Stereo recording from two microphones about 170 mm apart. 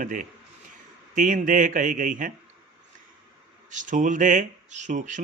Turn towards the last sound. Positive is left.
turn(degrees=-45)  # may be behind; listen again after turning